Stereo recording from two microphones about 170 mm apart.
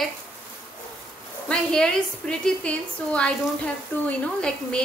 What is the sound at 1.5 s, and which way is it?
A woman's voice, 5° left (ahead or behind).